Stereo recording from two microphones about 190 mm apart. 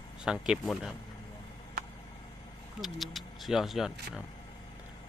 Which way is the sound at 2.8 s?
Centre (ahead or behind).